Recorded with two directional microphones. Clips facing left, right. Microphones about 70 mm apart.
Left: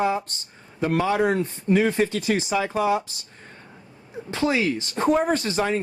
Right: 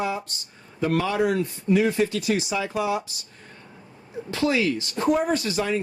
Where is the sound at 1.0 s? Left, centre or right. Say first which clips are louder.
Left 2 dB; left.